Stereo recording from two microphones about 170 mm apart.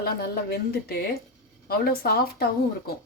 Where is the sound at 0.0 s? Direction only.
70° left (ahead or behind).